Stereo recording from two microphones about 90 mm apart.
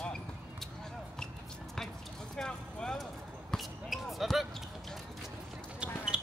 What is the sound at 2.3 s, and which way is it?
Vehicle, 5° left (ahead or behind).